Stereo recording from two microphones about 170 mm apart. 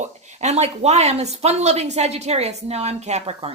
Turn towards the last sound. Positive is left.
turn(degrees=-40)  # may be behind; listen again after turning